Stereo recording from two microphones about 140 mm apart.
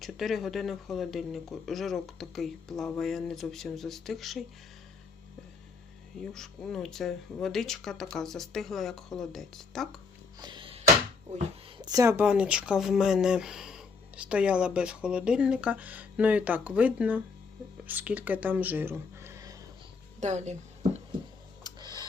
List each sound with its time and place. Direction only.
0.0 s speech: centre (ahead or behind)
6.1 s speech: 5° left (ahead or behind)
10.4 s a sound: 35° right (ahead or behind)
11.8 s a woman's voice: 25° right (ahead or behind)
12.2 s speech: 10° right (ahead or behind)
20.1 s a woman's voice: 55° right (ahead or behind)
21.6 s a sound: 30° right (ahead or behind)